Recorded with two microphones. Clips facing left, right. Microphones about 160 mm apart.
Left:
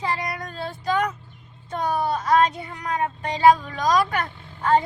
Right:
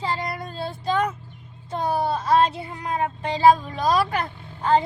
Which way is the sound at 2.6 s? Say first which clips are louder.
Even; 30° right (ahead or behind).